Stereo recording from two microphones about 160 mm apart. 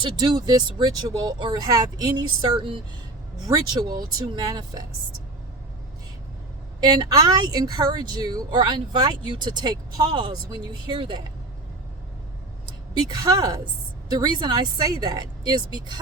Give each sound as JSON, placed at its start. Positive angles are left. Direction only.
{"t": 0.0, "sound": "a woman's voice", "side_deg": -30}
{"t": 6.7, "sound": "a woman's voice", "side_deg": -25}
{"t": 13.0, "sound": "a woman's voice", "side_deg": -25}